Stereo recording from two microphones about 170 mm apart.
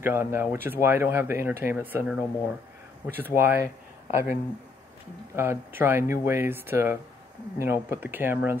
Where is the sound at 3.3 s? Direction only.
15° right (ahead or behind).